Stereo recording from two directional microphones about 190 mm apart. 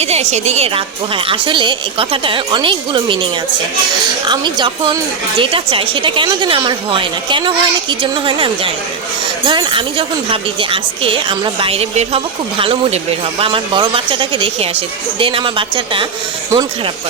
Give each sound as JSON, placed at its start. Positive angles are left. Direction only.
{"t": 0.0, "sound": "speech", "side_deg": -35}
{"t": 4.3, "sound": "speech", "side_deg": -25}